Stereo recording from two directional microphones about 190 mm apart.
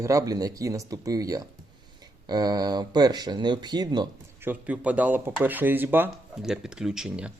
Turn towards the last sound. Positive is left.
turn(degrees=-5)  # may be behind; listen again after turning